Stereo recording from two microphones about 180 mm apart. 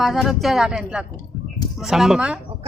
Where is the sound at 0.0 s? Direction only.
Centre (ahead or behind).